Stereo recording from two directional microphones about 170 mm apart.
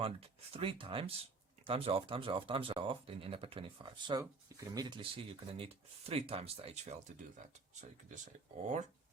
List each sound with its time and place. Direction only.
0.0 s speech: 35° right (ahead or behind)
7.8 s speech: 45° right (ahead or behind)